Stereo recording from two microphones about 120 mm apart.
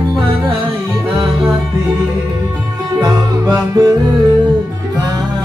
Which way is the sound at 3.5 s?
30° right (ahead or behind).